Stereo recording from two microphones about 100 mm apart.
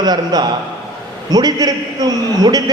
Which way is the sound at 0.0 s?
45° right (ahead or behind).